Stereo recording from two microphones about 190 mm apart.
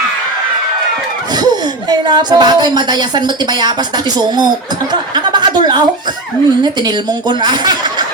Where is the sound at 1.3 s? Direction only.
20° right (ahead or behind).